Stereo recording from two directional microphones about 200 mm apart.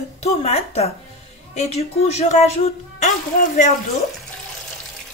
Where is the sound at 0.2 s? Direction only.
30° left (ahead or behind).